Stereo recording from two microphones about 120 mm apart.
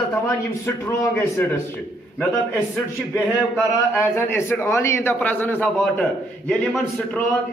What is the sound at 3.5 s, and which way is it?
A man's voice, 15° left (ahead or behind).